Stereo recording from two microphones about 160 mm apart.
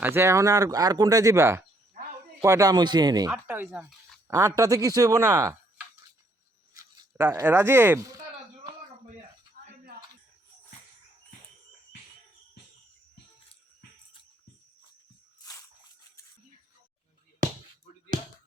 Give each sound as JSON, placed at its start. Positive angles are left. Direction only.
{"t": 0.0, "sound": "speech", "side_deg": -15}
{"t": 3.3, "sound": "speech", "side_deg": -10}
{"t": 6.7, "sound": "speech", "side_deg": -15}
{"t": 9.6, "sound": "a sound", "side_deg": -60}